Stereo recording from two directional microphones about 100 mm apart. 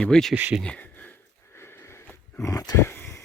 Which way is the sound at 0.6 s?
15° left (ahead or behind).